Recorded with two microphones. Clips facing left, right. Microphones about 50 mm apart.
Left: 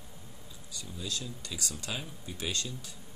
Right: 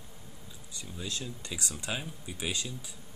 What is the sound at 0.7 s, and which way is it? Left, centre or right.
Speech, right.